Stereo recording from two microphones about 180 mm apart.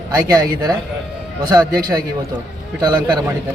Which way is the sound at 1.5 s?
20° right (ahead or behind).